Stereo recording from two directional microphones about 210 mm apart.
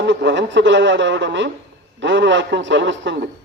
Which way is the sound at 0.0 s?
55° right (ahead or behind).